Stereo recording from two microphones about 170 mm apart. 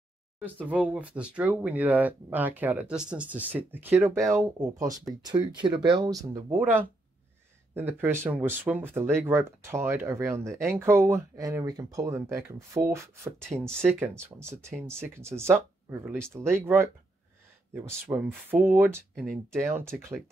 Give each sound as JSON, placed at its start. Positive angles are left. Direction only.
{"t": 0.4, "sound": "speech", "side_deg": -10}